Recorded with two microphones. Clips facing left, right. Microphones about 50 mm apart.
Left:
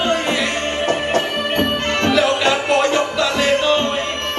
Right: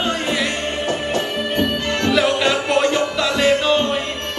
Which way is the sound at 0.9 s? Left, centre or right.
Left.